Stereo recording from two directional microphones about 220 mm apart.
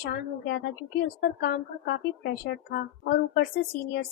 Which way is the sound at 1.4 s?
45° left (ahead or behind).